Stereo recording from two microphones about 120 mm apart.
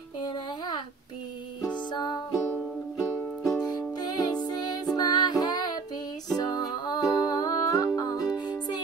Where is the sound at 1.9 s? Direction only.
35° left (ahead or behind).